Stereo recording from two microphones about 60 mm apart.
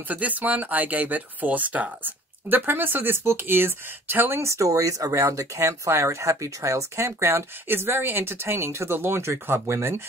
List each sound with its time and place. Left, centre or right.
0.1 s speech: right
4.4 s speech: right